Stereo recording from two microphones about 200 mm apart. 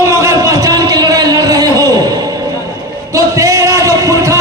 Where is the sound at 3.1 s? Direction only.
15° right (ahead or behind).